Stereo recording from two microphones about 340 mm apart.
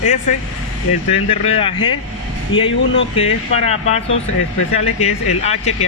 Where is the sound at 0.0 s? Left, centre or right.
Left.